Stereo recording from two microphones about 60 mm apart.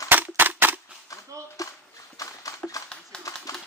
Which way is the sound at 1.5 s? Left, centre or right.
Left.